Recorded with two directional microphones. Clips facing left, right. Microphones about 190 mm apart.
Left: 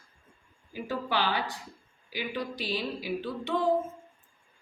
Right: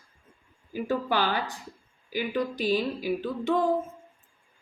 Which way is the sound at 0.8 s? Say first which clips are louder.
Right 3 dB; 45° right (ahead or behind).